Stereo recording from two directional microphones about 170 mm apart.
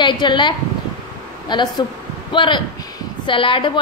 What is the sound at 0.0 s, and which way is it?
A woman's voice, 25° left (ahead or behind).